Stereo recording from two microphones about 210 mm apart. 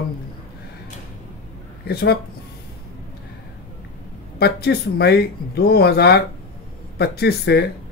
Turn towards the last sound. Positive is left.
turn(degrees=50)  # may be behind; listen again after turning